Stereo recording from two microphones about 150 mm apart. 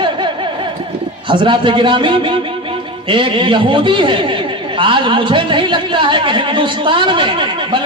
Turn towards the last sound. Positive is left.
turn(degrees=-35)  # may be behind; listen again after turning